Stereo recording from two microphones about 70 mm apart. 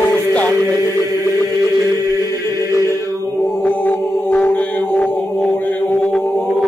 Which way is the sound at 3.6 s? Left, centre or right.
Left.